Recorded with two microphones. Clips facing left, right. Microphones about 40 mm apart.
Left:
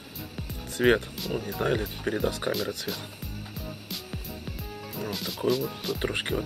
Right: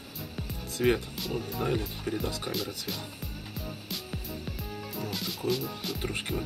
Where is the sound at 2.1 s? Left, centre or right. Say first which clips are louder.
Left 4 dB; left.